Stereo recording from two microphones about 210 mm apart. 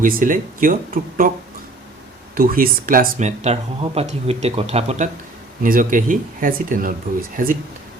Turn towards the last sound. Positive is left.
turn(degrees=-40)  # may be behind; listen again after turning